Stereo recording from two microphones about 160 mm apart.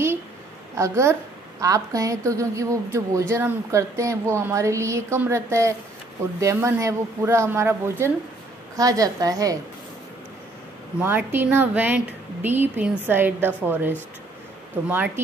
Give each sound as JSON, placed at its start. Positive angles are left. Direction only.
{"t": 0.7, "sound": "a woman's voice", "side_deg": -20}
{"t": 11.0, "sound": "speech", "side_deg": -15}